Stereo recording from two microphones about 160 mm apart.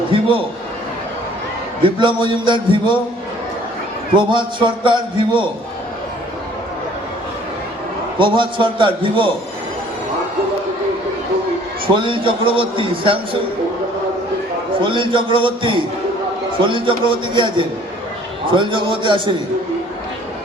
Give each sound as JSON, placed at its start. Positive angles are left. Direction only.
{"t": 0.1, "sound": "a sound", "side_deg": -35}
{"t": 1.8, "sound": "a man's voice", "side_deg": -30}
{"t": 4.1, "sound": "a man's voice", "side_deg": -30}
{"t": 8.2, "sound": "a man's voice", "side_deg": -30}
{"t": 11.9, "sound": "a man's voice", "side_deg": -30}
{"t": 14.8, "sound": "a man's voice", "side_deg": -30}